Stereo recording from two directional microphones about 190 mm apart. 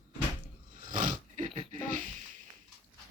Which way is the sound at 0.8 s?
45° right (ahead or behind).